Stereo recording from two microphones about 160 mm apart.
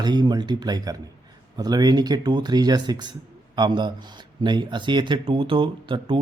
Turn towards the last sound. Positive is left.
turn(degrees=-30)  # may be behind; listen again after turning